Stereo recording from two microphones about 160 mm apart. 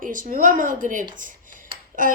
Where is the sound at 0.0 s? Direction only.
55° right (ahead or behind).